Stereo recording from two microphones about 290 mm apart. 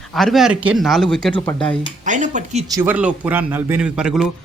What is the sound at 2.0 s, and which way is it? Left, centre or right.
Speech, right.